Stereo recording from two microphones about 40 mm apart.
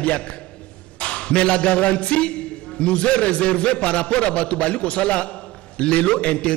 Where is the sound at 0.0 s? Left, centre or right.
Left.